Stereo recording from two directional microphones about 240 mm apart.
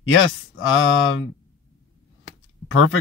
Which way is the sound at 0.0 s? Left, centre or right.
Left.